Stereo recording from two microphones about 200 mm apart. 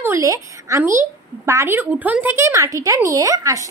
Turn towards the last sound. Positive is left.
turn(degrees=-15)  # may be behind; listen again after turning